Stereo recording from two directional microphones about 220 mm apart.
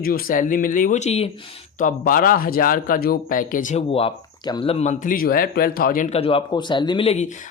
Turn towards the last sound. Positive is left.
turn(degrees=25)  # may be behind; listen again after turning